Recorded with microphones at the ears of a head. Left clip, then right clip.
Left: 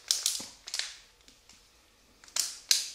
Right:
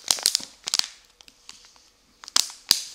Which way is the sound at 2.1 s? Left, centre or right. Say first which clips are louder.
Right 10 dB; right.